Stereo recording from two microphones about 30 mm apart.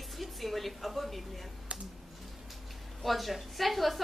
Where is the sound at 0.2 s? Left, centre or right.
Centre.